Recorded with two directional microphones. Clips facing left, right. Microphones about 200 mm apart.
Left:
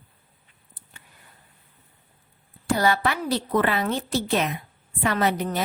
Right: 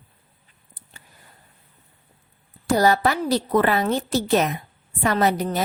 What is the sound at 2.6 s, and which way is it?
Speech, 40° right (ahead or behind).